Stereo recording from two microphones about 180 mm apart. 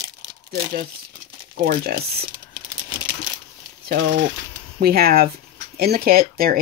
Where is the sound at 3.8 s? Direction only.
65° right (ahead or behind).